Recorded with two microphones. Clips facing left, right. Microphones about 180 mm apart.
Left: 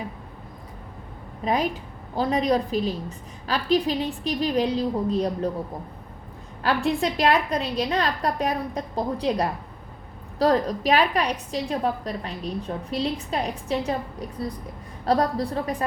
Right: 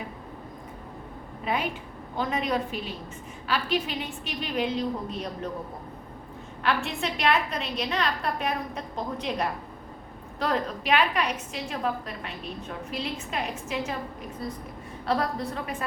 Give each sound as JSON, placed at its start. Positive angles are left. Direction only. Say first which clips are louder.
{"t": 1.5, "sound": "a woman's voice", "louder": "left 5 dB", "side_deg": 35}
{"t": 6.6, "sound": "a woman's voice", "louder": "left 5 dB", "side_deg": 35}